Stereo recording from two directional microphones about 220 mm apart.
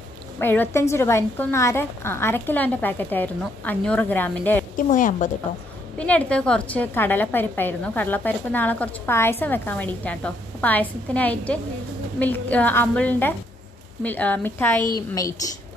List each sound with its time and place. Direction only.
0.4 s a woman's voice: 10° left (ahead or behind)
4.7 s speech: 35° left (ahead or behind)
5.9 s a woman's voice: 5° left (ahead or behind)